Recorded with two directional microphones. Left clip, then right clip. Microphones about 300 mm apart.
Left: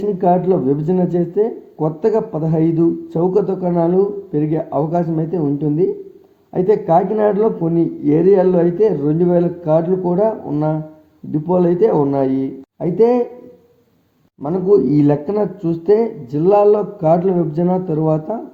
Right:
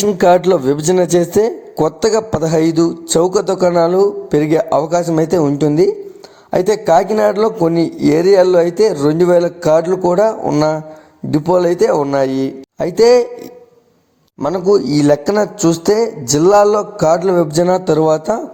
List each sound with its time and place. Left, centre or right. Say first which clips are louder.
0.0 s a man's voice: right 5 dB; right
14.8 s a man's voice: right 2 dB; right